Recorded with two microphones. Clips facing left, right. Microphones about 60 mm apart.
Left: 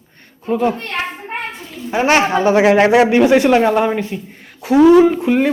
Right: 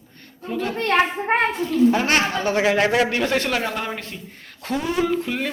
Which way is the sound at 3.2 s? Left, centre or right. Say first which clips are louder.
Left 11 dB; centre.